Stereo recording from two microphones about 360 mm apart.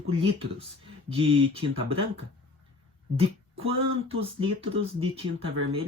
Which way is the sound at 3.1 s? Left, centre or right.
Centre.